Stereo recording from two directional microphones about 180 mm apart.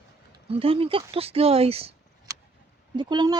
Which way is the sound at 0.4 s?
30° right (ahead or behind).